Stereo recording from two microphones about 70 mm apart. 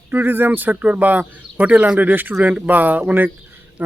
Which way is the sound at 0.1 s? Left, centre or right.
Right.